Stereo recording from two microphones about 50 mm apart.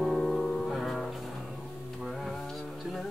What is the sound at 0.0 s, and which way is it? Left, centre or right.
Music, centre.